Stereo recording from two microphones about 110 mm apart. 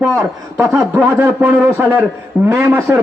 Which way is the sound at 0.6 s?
25° right (ahead or behind).